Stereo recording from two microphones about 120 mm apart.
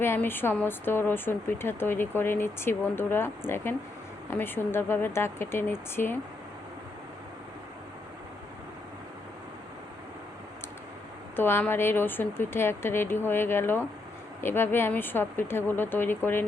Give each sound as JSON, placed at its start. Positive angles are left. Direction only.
{"t": 0.0, "sound": "speech", "side_deg": 20}
{"t": 11.3, "sound": "speech", "side_deg": 20}